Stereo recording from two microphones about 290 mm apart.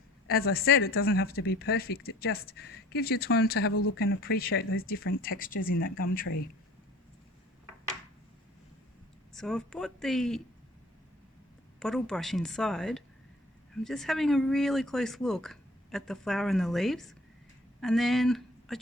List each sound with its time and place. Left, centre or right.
0.3 s speech: left
9.3 s speech: centre
11.8 s speech: centre